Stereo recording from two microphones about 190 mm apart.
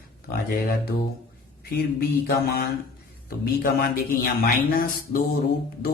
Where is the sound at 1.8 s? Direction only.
55° left (ahead or behind).